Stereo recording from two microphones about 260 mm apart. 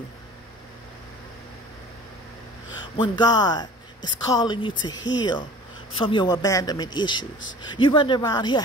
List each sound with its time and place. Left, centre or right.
3.0 s speech: centre
5.9 s speech: centre